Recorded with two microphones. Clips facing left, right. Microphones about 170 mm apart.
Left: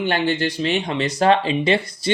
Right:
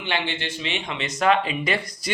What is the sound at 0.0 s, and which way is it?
Speech, 40° left (ahead or behind).